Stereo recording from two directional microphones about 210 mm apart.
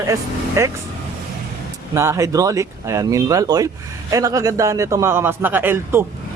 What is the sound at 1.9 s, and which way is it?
Speech, 15° right (ahead or behind).